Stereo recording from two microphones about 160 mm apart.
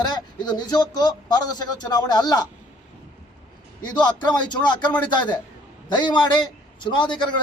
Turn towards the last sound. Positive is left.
turn(degrees=30)  # may be behind; listen again after turning